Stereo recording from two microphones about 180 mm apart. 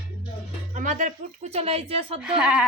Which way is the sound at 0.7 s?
45° right (ahead or behind).